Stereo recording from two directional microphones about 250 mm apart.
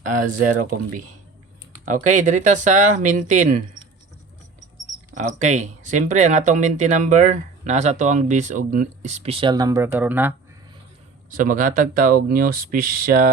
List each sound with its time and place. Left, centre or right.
0.0 s speech: right
5.1 s speech: right; by 10.3 s centre
11.3 s speech: right